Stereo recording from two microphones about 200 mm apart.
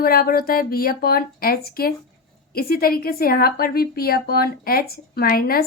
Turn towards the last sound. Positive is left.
turn(degrees=50)  # may be behind; listen again after turning